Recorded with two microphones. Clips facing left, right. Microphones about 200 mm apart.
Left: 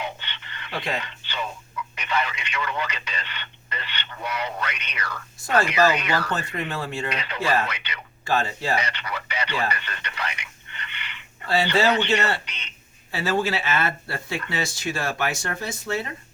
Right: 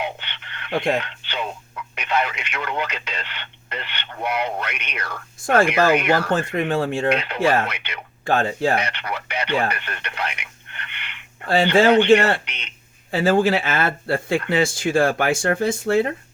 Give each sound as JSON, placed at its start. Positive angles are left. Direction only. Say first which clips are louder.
{"t": 0.0, "sound": "radio", "louder": "right 4 dB", "side_deg": -60}
{"t": 2.0, "sound": "speech", "louder": "right 4 dB", "side_deg": -60}